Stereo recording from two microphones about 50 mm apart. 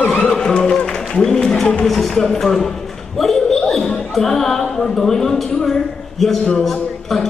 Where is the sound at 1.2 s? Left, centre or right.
Centre.